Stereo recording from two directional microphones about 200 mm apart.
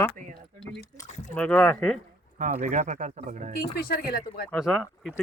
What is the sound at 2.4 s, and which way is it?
Speech, 35° right (ahead or behind).